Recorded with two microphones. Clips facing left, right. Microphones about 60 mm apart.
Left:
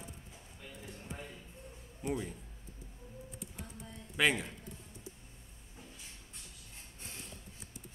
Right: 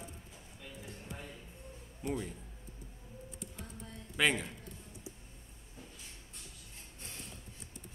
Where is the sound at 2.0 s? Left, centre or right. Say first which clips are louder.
Left 1 dB; centre.